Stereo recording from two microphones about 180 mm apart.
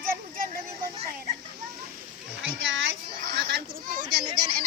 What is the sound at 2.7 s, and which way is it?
Speech, 90° right.